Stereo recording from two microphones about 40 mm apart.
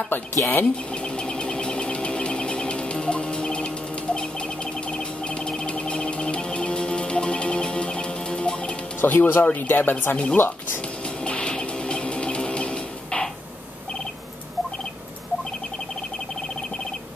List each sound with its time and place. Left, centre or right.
0.1 s speech: left
1.0 s a sound: left
5.7 s music: left
9.0 s speech: left
11.2 s music: left